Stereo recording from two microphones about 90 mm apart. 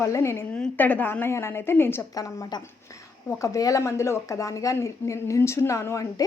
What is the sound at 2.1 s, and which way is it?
Speech, 40° left (ahead or behind).